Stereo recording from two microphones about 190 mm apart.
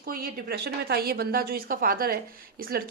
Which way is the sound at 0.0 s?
50° right (ahead or behind).